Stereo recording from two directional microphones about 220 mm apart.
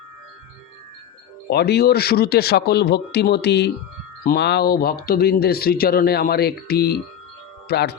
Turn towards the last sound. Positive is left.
turn(degrees=45)  # may be behind; listen again after turning